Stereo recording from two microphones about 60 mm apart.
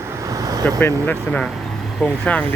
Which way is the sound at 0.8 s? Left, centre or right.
Left.